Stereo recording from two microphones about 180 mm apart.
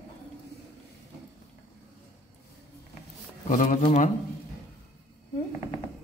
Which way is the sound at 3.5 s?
45° left (ahead or behind).